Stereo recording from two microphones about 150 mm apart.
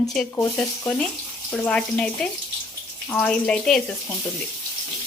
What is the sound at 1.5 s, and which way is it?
Speech, 10° left (ahead or behind).